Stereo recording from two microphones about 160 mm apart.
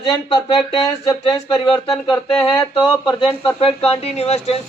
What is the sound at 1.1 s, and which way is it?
Speech, centre (ahead or behind).